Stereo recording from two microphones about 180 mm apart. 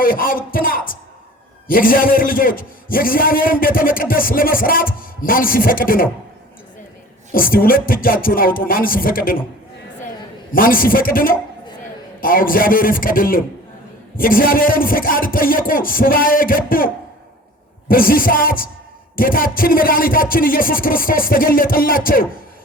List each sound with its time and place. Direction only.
0.0 s a man's voice: 50° left (ahead or behind)
7.3 s a man's voice: 55° left (ahead or behind)
10.5 s a man's voice: 50° left (ahead or behind)